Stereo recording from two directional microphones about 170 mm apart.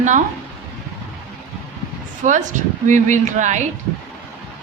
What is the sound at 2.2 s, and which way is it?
Speech, 45° right (ahead or behind).